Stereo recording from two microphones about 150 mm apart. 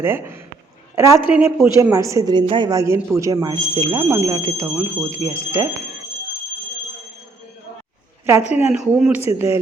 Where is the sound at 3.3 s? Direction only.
30° right (ahead or behind).